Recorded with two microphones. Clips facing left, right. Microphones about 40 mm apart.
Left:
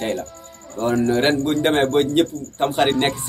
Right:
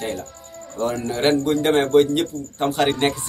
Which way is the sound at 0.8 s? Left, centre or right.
Centre.